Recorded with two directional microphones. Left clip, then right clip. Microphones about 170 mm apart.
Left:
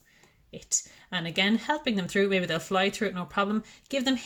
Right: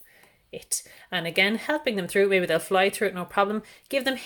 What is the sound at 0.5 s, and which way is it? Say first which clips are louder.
Speech: left 2 dB; 30° right (ahead or behind).